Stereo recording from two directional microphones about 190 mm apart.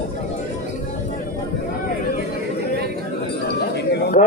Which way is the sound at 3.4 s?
60° left (ahead or behind).